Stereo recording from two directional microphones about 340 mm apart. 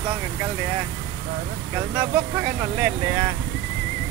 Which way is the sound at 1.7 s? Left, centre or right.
Centre.